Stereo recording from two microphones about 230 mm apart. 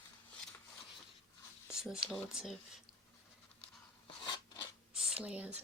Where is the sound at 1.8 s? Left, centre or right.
Centre.